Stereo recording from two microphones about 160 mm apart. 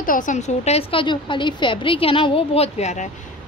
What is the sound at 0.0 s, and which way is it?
A woman's voice, 55° left (ahead or behind).